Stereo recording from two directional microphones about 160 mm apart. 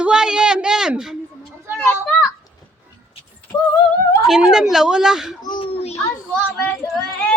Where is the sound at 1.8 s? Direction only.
10° left (ahead or behind).